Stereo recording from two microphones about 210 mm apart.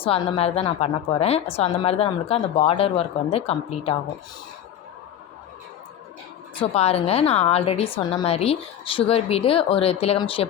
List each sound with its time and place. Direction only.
0.0 s a woman's voice: 25° left (ahead or behind)
6.6 s a woman's voice: 30° left (ahead or behind)